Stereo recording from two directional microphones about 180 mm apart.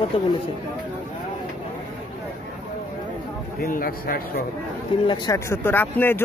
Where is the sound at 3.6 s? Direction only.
55° left (ahead or behind).